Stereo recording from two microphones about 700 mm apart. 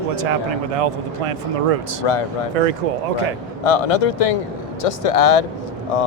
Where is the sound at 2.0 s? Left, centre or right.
Left.